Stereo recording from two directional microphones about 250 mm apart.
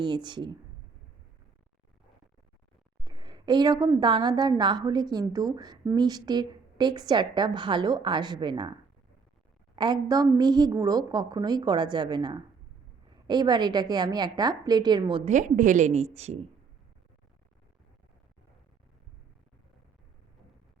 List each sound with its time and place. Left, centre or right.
0.0 s a woman's voice: centre
3.0 s a woman's voice: centre
9.7 s a woman's voice: centre